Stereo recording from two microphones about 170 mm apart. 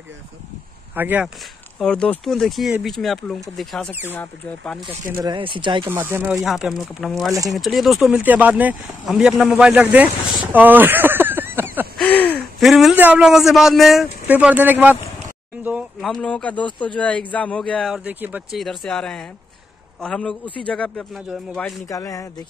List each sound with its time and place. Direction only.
0.9 s speech: 10° right (ahead or behind)
1.8 s speech: 5° left (ahead or behind)
5.1 s speech: 25° right (ahead or behind)
5.9 s speech: 10° right (ahead or behind)
6.4 s speech: centre (ahead or behind)
12.0 s a sound: 10° left (ahead or behind)
12.5 s speech: centre (ahead or behind)
21.8 s speech: 20° left (ahead or behind)